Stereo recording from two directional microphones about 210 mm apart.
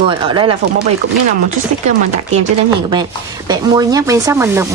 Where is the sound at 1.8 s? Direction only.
30° right (ahead or behind).